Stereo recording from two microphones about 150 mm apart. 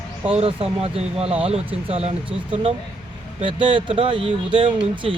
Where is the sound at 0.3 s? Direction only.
40° right (ahead or behind).